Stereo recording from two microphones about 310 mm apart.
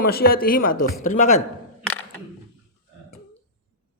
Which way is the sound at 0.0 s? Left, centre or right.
Left.